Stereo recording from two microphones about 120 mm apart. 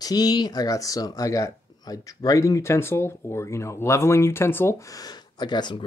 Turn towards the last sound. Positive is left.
turn(degrees=40)  # may be behind; listen again after turning